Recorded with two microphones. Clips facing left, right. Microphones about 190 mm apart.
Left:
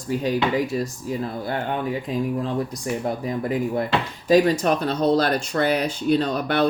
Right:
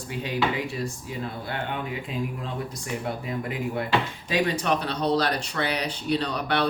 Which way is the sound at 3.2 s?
35° left (ahead or behind).